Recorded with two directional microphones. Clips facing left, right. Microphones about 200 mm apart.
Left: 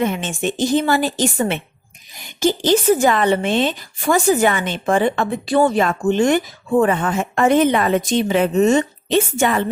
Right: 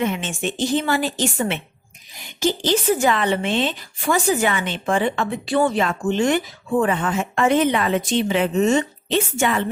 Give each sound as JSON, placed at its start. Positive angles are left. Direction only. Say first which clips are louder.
{"t": 0.0, "sound": "a woman's voice", "louder": "left 3 dB", "side_deg": 40}